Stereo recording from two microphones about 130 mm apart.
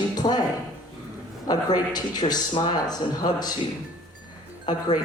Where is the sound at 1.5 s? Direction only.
30° left (ahead or behind).